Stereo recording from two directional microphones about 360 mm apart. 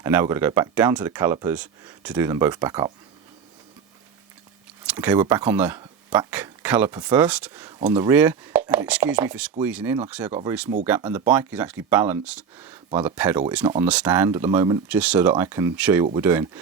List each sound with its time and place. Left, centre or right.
0.0 s speech: centre
4.9 s speech: centre